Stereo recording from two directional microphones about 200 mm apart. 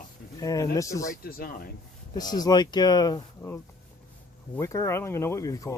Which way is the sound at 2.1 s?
20° left (ahead or behind).